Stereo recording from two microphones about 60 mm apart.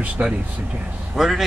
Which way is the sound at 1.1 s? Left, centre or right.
Centre.